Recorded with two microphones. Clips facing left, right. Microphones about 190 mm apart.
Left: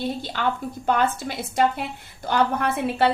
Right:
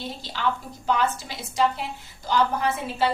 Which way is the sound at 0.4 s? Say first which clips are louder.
Right 2 dB; 55° left (ahead or behind).